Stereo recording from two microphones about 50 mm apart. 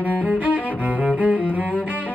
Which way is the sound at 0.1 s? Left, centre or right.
Right.